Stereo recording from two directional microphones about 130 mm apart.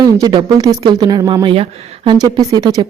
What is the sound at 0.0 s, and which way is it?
Speech, 30° right (ahead or behind).